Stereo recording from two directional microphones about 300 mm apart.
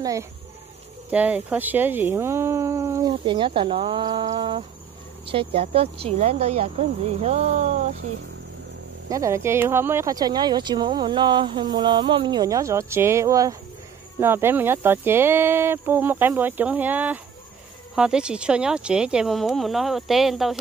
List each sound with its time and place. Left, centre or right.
0.0 s speech: centre
9.1 s speech: centre